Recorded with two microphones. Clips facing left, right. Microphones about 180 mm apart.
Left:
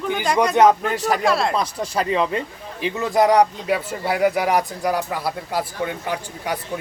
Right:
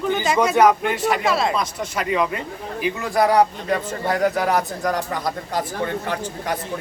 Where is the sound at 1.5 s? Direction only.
30° left (ahead or behind).